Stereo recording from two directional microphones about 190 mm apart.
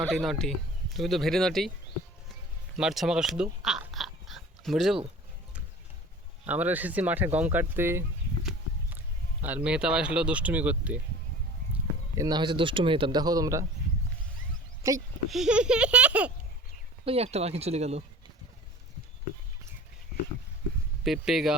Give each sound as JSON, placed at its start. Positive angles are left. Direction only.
{"t": 0.1, "sound": "speech", "side_deg": 0}
{"t": 2.7, "sound": "a sound", "side_deg": 0}
{"t": 6.4, "sound": "speech", "side_deg": -10}
{"t": 12.1, "sound": "speech", "side_deg": -20}
{"t": 14.8, "sound": "speech", "side_deg": -15}
{"t": 15.3, "sound": "speech", "side_deg": -5}
{"t": 17.1, "sound": "speech", "side_deg": -35}
{"t": 21.0, "sound": "speech", "side_deg": 0}